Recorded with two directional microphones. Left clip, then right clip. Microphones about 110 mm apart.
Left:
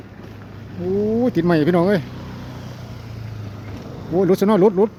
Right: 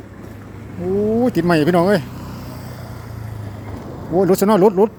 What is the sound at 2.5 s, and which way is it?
Vehicle, 40° right (ahead or behind).